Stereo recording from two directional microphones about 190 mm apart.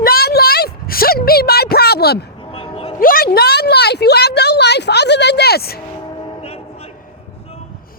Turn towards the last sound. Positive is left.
turn(degrees=30)  # may be behind; listen again after turning